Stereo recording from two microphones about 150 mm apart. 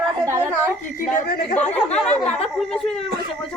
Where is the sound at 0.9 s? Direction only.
70° left (ahead or behind).